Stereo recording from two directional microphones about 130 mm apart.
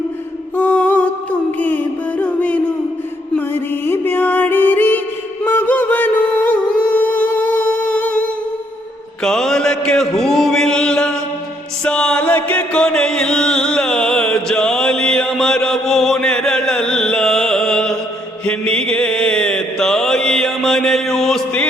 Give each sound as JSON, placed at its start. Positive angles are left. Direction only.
{"t": 0.5, "sound": "music", "side_deg": 15}
{"t": 9.2, "sound": "mantra", "side_deg": 5}
{"t": 11.9, "sound": "chant", "side_deg": 5}
{"t": 18.4, "sound": "mantra", "side_deg": 10}